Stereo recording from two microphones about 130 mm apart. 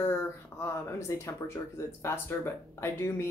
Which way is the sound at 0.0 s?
20° left (ahead or behind).